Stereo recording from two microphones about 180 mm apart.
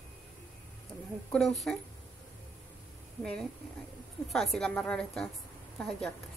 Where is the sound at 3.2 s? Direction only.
5° left (ahead or behind).